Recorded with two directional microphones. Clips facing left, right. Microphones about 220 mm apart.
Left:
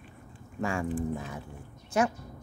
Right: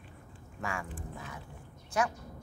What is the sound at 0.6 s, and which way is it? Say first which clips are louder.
A woman's voice: left 9 dB; 30° left (ahead or behind).